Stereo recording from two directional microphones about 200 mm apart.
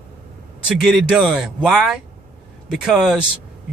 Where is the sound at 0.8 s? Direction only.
Centre (ahead or behind).